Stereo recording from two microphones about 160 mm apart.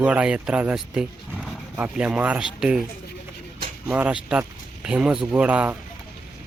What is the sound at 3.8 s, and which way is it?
Speech, 10° right (ahead or behind).